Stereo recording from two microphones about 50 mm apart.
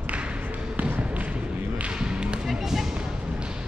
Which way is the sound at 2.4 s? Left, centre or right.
Centre.